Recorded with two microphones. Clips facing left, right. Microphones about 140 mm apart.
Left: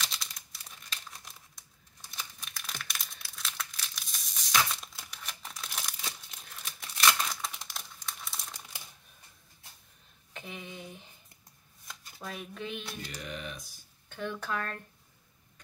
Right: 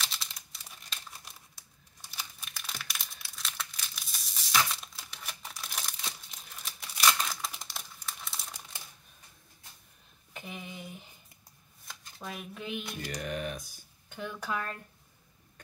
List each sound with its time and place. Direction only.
0.0 s crumpling: centre (ahead or behind)
10.3 s a sound: 5° right (ahead or behind)
11.9 s speech: centre (ahead or behind)
13.1 s speech: 50° right (ahead or behind)
14.0 s speech: 10° right (ahead or behind)